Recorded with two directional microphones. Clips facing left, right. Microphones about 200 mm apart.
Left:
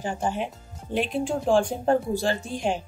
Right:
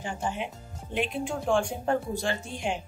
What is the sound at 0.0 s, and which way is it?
A woman's voice, 40° left (ahead or behind).